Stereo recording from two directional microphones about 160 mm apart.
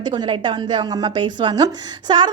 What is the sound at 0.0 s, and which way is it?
A woman's voice, 25° right (ahead or behind).